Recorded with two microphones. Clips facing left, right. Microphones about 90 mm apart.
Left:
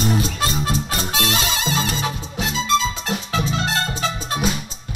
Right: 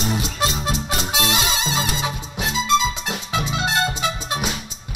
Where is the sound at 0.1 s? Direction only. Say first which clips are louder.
Left 2 dB; 15° right (ahead or behind).